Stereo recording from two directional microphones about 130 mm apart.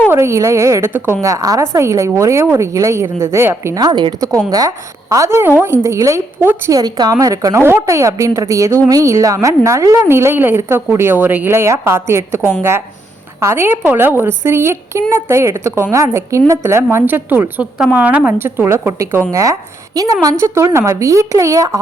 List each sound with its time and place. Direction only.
0.1 s a woman's voice: 20° right (ahead or behind)
3.8 s a woman's voice: 35° right (ahead or behind)
6.7 s a woman's voice: 30° right (ahead or behind)